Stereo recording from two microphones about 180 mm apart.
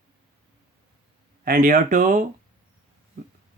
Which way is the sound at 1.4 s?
55° right (ahead or behind).